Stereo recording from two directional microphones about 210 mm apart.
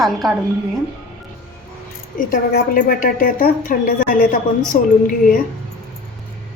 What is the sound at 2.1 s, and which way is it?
A woman's voice, 40° left (ahead or behind).